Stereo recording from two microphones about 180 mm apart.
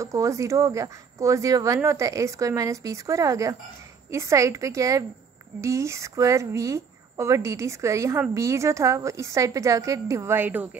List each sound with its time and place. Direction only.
0.0 s a woman's voice: 15° right (ahead or behind)